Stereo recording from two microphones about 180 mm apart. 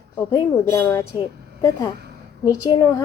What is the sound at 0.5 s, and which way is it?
Speech, 15° left (ahead or behind).